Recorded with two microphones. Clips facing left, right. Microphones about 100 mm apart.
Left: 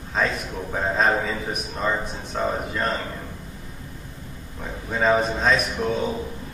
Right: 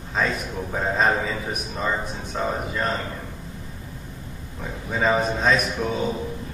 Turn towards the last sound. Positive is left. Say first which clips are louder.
# even
turn(degrees=0)  # may be behind; listen again after turning